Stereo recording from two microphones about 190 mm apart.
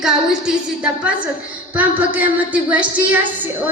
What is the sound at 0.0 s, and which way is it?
A woman's voice, 5° right (ahead or behind).